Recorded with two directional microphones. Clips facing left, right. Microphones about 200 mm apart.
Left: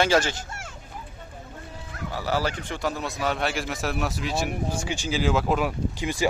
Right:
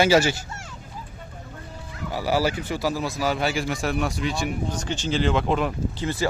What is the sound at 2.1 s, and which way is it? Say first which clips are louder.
Speech: right 4 dB; 10° right (ahead or behind).